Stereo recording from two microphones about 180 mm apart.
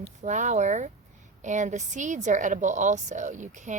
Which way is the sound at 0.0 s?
40° right (ahead or behind).